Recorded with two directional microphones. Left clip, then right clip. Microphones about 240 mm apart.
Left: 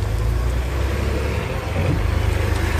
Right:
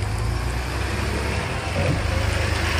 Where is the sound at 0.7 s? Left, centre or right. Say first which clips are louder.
Left 2 dB; right.